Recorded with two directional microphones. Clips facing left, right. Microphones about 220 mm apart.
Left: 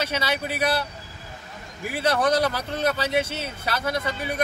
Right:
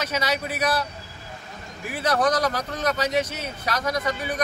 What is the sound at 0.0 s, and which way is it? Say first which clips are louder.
Speech: even; 30° left (ahead or behind).